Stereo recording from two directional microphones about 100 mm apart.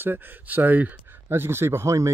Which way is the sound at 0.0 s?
20° right (ahead or behind).